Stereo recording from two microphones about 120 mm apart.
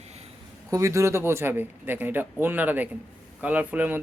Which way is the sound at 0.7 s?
25° right (ahead or behind).